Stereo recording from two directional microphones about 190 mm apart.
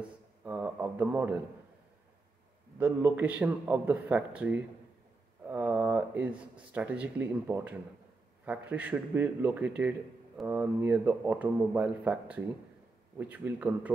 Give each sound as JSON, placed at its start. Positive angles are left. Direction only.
{"t": 0.4, "sound": "a man's voice", "side_deg": -5}
{"t": 2.8, "sound": "a man's voice", "side_deg": -10}